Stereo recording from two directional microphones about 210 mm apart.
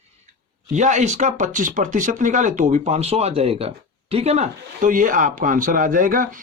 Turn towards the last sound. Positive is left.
turn(degrees=-40)  # may be behind; listen again after turning